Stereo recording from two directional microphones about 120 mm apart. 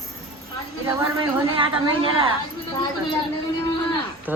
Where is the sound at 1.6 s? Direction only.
45° right (ahead or behind).